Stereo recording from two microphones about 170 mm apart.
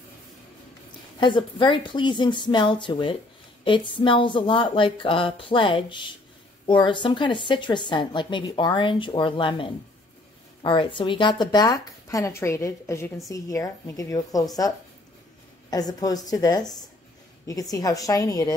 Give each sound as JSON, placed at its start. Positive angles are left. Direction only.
{"t": 1.2, "sound": "a woman's voice", "side_deg": 30}
{"t": 15.7, "sound": "a woman's voice", "side_deg": 20}